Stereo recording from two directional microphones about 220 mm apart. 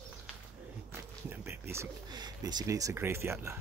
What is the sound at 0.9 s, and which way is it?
Pigeon, 10° right (ahead or behind).